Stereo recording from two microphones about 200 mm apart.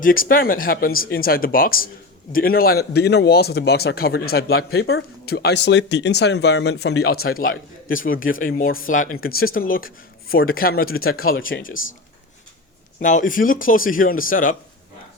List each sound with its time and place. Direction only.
0.0 s speech: 45° left (ahead or behind); by 7.1 s 75° left (ahead or behind)
7.3 s speech: 45° left (ahead or behind)
11.0 s speech: 90° left
13.0 s speech: 40° left (ahead or behind)